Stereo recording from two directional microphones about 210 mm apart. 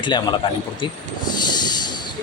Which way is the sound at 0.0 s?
20° left (ahead or behind).